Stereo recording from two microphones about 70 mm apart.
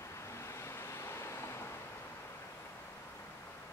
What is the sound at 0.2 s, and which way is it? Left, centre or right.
Vehicle, left.